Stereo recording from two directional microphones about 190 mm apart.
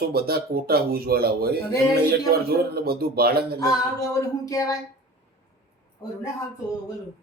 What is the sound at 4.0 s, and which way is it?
Speech, 15° left (ahead or behind).